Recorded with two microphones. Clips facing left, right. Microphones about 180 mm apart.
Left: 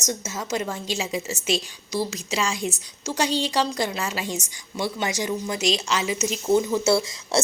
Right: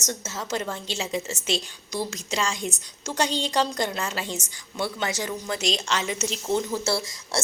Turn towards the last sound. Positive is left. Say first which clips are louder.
# left 6 dB
turn(degrees=20)  # may be behind; listen again after turning